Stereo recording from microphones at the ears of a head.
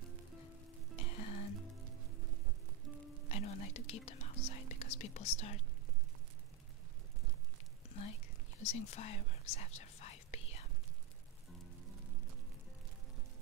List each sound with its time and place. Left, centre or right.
1.1 s music: left
3.2 s whispering: left
7.9 s whispering: left